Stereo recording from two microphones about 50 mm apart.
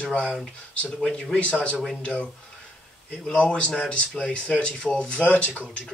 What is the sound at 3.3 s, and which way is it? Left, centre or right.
Speech, left.